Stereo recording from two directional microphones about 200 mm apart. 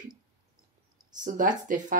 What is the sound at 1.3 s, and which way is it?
Speech, 40° right (ahead or behind).